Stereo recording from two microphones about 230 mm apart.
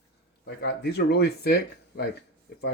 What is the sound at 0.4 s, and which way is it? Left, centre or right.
Speech, left.